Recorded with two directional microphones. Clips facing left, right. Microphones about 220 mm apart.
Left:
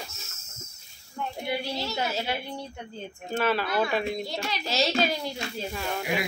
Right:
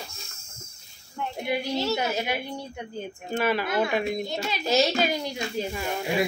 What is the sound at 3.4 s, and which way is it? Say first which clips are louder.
Speech: right 1 dB; 15° right (ahead or behind).